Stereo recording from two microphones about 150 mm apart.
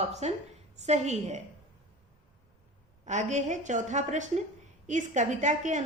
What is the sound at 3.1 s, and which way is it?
A woman's voice, 50° right (ahead or behind).